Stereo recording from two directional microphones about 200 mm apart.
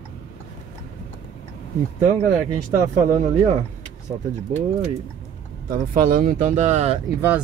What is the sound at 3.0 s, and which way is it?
Speech, 35° right (ahead or behind).